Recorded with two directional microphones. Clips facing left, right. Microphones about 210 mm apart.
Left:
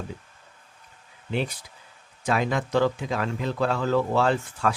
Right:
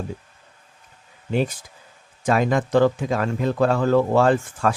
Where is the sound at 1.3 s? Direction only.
45° right (ahead or behind).